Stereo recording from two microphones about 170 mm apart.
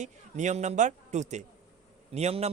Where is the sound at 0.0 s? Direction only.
45° right (ahead or behind).